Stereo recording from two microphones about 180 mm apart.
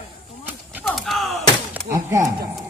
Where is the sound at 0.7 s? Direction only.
Centre (ahead or behind).